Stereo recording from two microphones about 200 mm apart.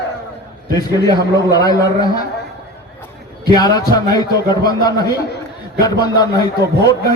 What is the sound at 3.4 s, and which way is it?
A man's voice, 20° left (ahead or behind).